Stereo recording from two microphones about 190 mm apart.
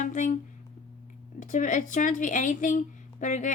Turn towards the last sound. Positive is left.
turn(degrees=40)  # may be behind; listen again after turning